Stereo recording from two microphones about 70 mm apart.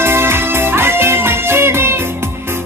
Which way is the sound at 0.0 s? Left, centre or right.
Right.